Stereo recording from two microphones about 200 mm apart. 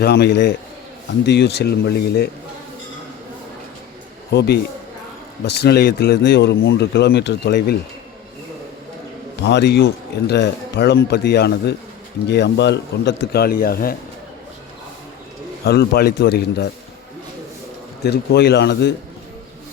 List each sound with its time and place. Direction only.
0.0 s speech: 55° left (ahead or behind)
4.3 s speech: 55° left (ahead or behind)
9.4 s speech: 60° left (ahead or behind)
15.6 s speech: 55° left (ahead or behind)
18.0 s speech: 55° left (ahead or behind)